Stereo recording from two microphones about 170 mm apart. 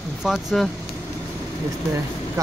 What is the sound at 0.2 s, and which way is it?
Speech, centre (ahead or behind).